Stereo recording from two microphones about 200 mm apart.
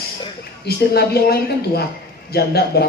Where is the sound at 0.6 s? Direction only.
50° left (ahead or behind).